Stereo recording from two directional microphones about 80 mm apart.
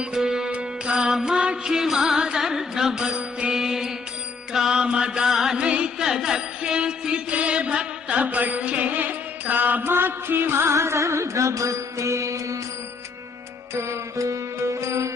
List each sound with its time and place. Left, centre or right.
0.0 s music: centre; by 12.5 s right
13.7 s music: right